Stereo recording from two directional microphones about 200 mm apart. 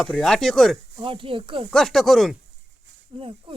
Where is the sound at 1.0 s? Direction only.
25° right (ahead or behind).